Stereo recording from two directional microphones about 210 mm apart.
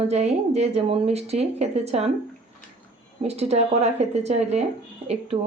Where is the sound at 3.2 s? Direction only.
30° right (ahead or behind).